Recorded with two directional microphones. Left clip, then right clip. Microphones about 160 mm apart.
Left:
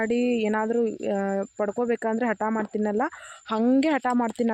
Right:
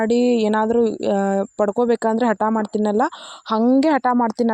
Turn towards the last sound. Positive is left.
turn(degrees=-30)  # may be behind; listen again after turning